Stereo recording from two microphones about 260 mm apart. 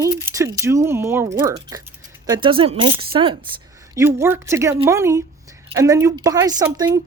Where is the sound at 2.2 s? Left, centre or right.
Centre.